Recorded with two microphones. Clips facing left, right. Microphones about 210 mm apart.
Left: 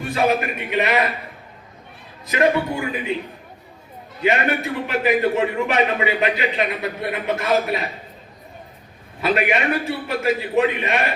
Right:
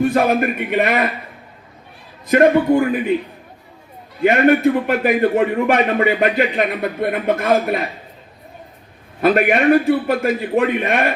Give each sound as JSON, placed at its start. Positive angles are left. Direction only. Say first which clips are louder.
{"t": 0.0, "sound": "a man's voice", "louder": "right 5 dB", "side_deg": -50}
{"t": 2.2, "sound": "a man's voice", "louder": "right 7 dB", "side_deg": -50}
{"t": 4.2, "sound": "a man's voice", "louder": "right 8 dB", "side_deg": -50}
{"t": 9.2, "sound": "a man's voice", "louder": "right 6 dB", "side_deg": -50}